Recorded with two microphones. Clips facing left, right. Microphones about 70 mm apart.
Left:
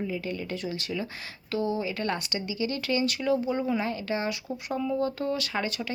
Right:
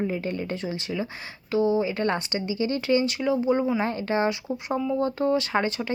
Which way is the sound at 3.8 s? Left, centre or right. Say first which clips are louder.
Right 5 dB; right.